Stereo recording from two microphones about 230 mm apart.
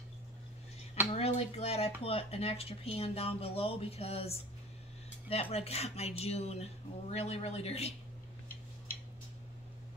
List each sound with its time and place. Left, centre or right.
1.1 s speech: left